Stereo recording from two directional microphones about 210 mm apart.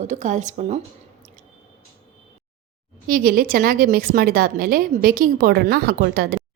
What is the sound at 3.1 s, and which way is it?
A woman's voice, 45° right (ahead or behind).